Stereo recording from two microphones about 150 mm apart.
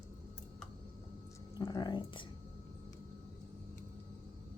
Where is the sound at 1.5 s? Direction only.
30° left (ahead or behind).